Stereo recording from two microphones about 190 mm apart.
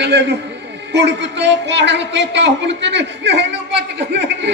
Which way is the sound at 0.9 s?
65° right (ahead or behind).